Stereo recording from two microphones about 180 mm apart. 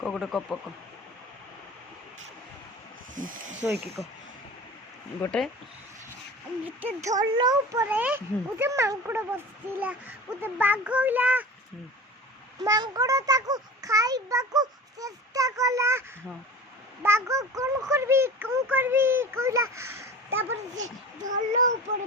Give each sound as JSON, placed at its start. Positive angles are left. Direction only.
{"t": 0.0, "sound": "speech", "side_deg": 0}
{"t": 3.2, "sound": "a child's voice", "side_deg": -50}
{"t": 3.6, "sound": "a child's voice", "side_deg": -10}
{"t": 5.2, "sound": "speech", "side_deg": 5}
{"t": 7.0, "sound": "a child's voice", "side_deg": -20}
{"t": 12.6, "sound": "a child's voice", "side_deg": -20}
{"t": 20.7, "sound": "a child's voice", "side_deg": -45}